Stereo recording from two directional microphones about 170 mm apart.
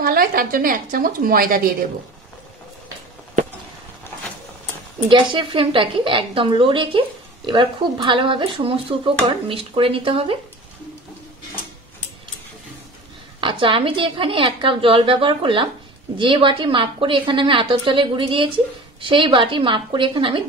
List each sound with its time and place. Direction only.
0.0 s a woman's voice: 60° right (ahead or behind)
5.1 s speech: 30° right (ahead or behind)
13.4 s a woman's voice: 30° right (ahead or behind)